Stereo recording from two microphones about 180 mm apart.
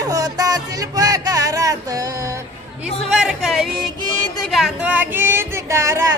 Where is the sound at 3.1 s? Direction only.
5° right (ahead or behind).